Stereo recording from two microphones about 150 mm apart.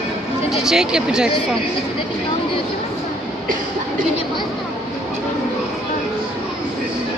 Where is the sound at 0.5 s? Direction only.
5° right (ahead or behind).